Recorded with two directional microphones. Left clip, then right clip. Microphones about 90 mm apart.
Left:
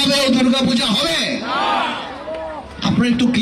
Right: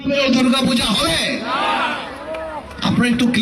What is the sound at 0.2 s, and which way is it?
Speech, 30° right (ahead or behind).